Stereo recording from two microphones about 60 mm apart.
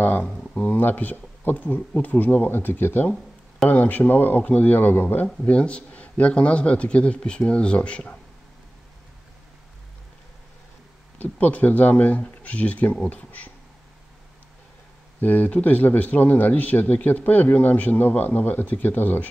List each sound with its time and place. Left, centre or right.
0.2 s a sound: centre
0.6 s speech: left
11.3 s speech: left
15.1 s speech: left